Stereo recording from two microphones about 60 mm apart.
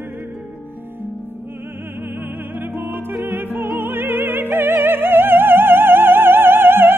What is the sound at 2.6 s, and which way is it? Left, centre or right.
Music, right.